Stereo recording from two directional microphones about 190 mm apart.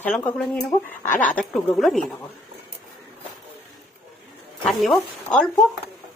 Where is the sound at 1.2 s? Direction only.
5° left (ahead or behind).